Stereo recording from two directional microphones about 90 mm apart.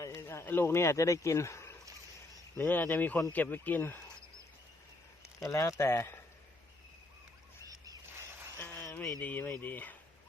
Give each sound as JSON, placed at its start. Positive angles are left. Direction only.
{"t": 0.0, "sound": "speech", "side_deg": 30}
{"t": 2.6, "sound": "speech", "side_deg": 20}
{"t": 5.5, "sound": "speech", "side_deg": 35}
{"t": 8.5, "sound": "a sound", "side_deg": 25}
{"t": 9.2, "sound": "speech", "side_deg": 20}